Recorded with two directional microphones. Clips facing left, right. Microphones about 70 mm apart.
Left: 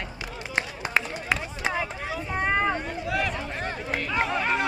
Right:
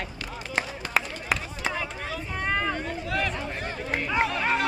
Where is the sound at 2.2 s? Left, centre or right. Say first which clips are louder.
Left 3 dB; left.